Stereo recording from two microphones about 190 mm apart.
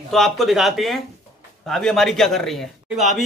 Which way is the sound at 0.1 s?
Centre (ahead or behind).